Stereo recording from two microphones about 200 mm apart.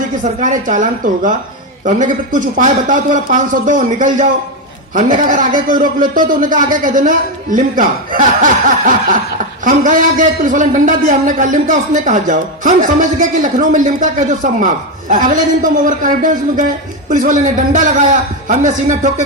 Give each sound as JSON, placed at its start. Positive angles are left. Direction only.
{"t": 0.3, "sound": "a man's voice", "side_deg": -40}